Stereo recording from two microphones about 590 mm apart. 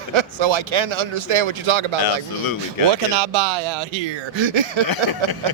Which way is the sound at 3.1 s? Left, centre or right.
Right.